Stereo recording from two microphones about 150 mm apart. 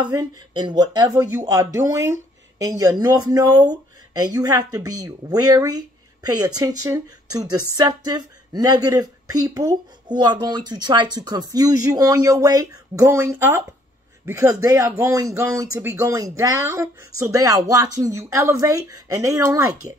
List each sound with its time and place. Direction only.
0.0 s speech: 25° right (ahead or behind)